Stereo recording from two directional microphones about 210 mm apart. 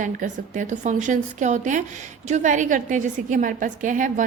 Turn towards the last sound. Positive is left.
turn(degrees=-40)  # may be behind; listen again after turning